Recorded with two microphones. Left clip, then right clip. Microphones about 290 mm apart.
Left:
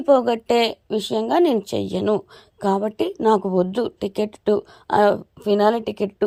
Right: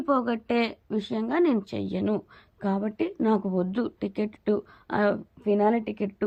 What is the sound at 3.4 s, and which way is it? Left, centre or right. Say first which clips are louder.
Speech: left 8 dB; left.